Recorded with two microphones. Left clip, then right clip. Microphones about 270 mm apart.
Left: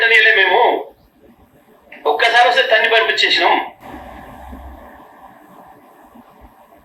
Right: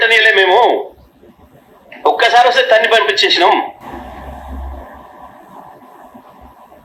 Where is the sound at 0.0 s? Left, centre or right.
Centre.